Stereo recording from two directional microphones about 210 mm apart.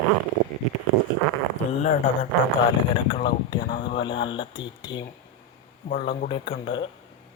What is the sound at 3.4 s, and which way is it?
Speech, 20° left (ahead or behind).